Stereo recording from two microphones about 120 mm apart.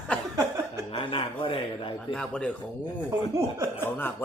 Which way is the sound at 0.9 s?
45° left (ahead or behind).